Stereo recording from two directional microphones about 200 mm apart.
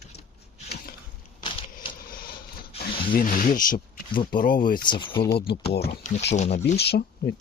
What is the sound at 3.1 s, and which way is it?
Speech, 45° left (ahead or behind).